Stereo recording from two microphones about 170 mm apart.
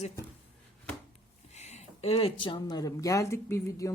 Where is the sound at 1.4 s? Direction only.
40° left (ahead or behind).